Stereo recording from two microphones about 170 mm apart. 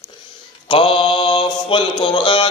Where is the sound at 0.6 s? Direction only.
30° left (ahead or behind).